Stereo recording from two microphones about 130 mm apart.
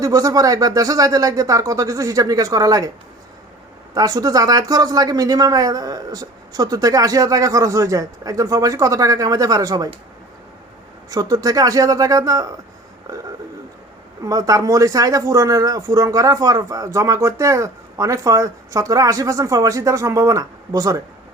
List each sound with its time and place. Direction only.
0.0 s speech: 25° right (ahead or behind)
3.9 s speech: 30° right (ahead or behind)
11.1 s speech: 25° right (ahead or behind)
13.1 s burping: 25° right (ahead or behind)
14.3 s speech: 25° right (ahead or behind)